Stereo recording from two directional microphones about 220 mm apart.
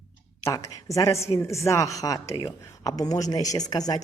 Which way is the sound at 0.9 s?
15° left (ahead or behind).